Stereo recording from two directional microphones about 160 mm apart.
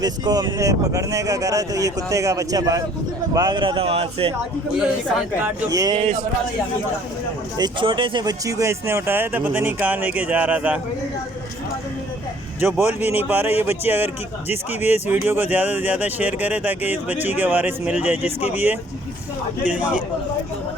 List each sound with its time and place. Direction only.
0.0 s speech: 25° right (ahead or behind)
5.7 s speech: 25° right (ahead or behind)
7.6 s speech: 30° right (ahead or behind); by 10.8 s 10° right (ahead or behind)
12.5 s speech: 15° right (ahead or behind)